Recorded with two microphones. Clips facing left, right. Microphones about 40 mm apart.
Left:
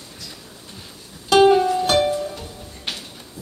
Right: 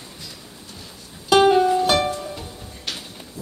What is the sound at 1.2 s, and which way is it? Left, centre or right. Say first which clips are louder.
Music: left 1 dB; centre.